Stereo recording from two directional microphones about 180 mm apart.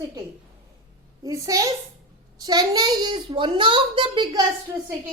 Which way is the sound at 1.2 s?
20° right (ahead or behind).